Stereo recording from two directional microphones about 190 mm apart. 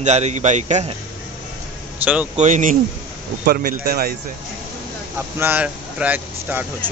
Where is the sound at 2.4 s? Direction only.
40° right (ahead or behind).